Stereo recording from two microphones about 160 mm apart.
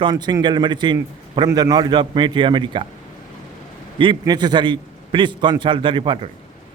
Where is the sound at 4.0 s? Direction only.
30° right (ahead or behind).